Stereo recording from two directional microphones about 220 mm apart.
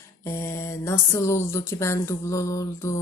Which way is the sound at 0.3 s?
10° left (ahead or behind).